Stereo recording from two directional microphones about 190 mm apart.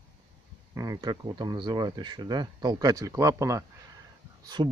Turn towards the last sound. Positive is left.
turn(degrees=-25)  # may be behind; listen again after turning